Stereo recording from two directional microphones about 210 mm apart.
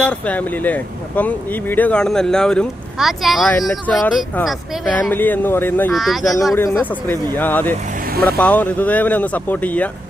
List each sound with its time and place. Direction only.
0.0 s speech: 5° left (ahead or behind)
5.9 s speech: centre (ahead or behind)
6.5 s speech: 15° left (ahead or behind)